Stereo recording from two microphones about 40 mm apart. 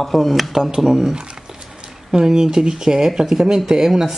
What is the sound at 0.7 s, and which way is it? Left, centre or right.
Speech, centre.